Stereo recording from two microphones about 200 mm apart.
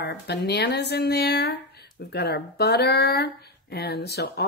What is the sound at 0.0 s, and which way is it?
Speech, 60° left (ahead or behind).